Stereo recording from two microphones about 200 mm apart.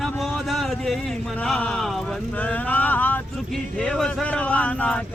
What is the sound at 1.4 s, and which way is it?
Speech, 5° left (ahead or behind).